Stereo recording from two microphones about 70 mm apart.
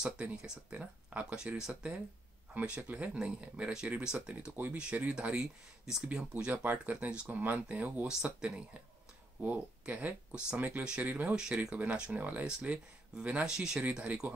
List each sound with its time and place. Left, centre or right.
0.0 s speech: centre
6.3 s speech: right
8.1 s speech: centre
9.4 s speech: right
11.3 s speech: centre
11.7 s speech: right